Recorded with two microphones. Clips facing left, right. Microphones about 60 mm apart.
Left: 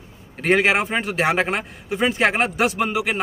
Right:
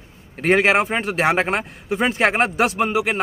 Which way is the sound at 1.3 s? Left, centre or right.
Right.